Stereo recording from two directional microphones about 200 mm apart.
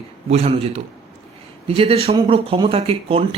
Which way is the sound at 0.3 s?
30° right (ahead or behind).